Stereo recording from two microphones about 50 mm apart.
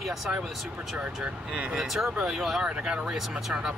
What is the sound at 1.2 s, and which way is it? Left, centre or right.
Speech, right.